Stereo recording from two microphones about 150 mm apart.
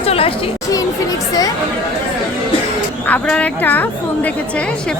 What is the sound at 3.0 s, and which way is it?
A woman's voice, 10° left (ahead or behind).